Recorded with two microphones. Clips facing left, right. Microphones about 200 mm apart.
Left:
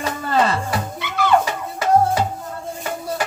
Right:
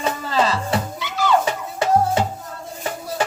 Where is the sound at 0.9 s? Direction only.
55° left (ahead or behind).